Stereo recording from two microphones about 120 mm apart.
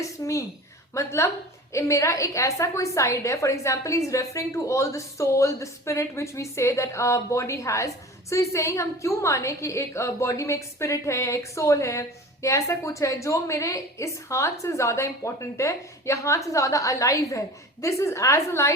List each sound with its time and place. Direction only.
0.2 s a woman's voice: 25° left (ahead or behind)